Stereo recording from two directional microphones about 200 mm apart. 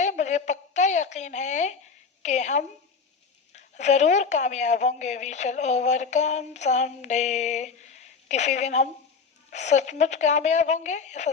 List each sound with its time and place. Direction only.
0.0 s a woman's voice: 35° left (ahead or behind)